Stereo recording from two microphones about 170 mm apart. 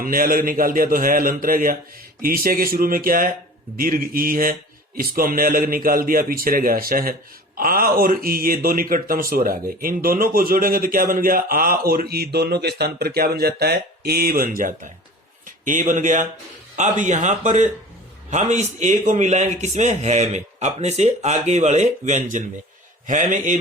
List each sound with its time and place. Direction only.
0.0 s a man's voice: 55° right (ahead or behind)